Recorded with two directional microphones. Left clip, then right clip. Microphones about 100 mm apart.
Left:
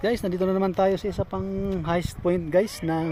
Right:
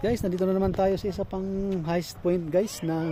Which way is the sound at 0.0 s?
15° right (ahead or behind).